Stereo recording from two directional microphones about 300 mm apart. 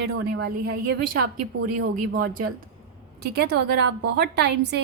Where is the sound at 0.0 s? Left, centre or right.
Right.